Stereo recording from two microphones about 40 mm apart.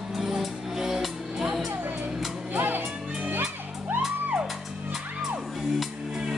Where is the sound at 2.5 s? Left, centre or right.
Right.